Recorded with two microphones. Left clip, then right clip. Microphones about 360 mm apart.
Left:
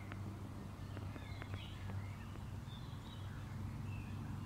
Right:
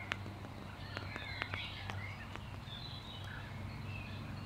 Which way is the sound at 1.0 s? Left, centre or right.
Right.